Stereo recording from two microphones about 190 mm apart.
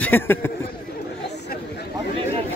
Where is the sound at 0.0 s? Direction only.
10° left (ahead or behind).